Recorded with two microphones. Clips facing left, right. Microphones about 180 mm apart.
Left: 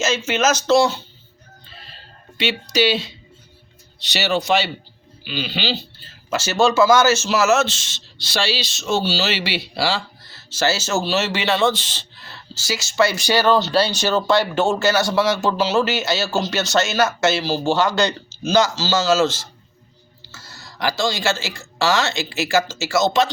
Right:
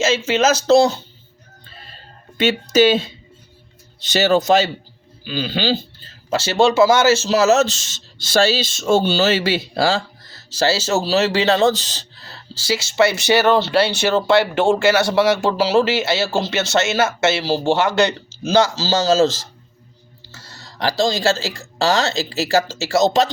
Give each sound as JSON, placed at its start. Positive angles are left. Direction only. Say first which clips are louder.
{"t": 0.3, "sound": "speech", "louder": "right 3 dB", "side_deg": -30}
{"t": 2.4, "sound": "speech", "louder": "right 5 dB", "side_deg": -45}
{"t": 6.3, "sound": "a man's voice", "louder": "right 2 dB", "side_deg": -30}